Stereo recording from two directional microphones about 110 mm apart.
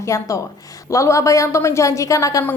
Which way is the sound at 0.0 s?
30° left (ahead or behind).